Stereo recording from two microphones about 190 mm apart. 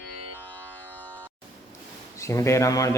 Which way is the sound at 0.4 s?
10° left (ahead or behind).